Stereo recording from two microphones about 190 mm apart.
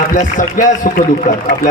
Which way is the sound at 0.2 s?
40° left (ahead or behind).